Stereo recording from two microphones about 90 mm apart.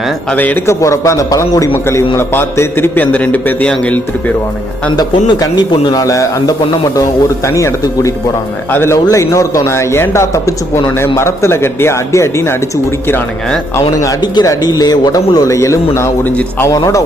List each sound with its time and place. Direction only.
0.3 s a man's voice: 20° left (ahead or behind)
0.7 s a man's voice: 35° left (ahead or behind); by 3.7 s 20° left (ahead or behind)
4.9 s a man's voice: 45° left (ahead or behind)
14.2 s speech: 50° left (ahead or behind)
16.2 s a man's voice: 20° left (ahead or behind)
16.7 s a man's voice: 40° left (ahead or behind)